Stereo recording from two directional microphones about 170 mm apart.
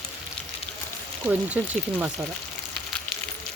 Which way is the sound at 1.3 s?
10° right (ahead or behind).